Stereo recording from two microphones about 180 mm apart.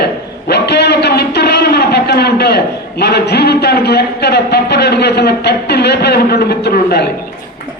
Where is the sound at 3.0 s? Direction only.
65° left (ahead or behind).